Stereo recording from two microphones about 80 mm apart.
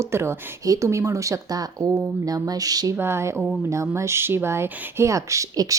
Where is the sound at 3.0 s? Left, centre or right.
Right.